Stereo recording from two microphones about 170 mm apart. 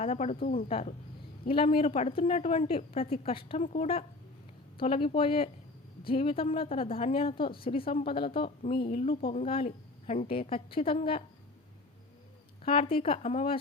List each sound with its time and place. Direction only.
0.0 s a woman's voice: 40° left (ahead or behind)
0.3 s speech: 55° left (ahead or behind)
0.7 s a woman's voice: 35° left (ahead or behind)
12.6 s a woman's voice: 35° left (ahead or behind)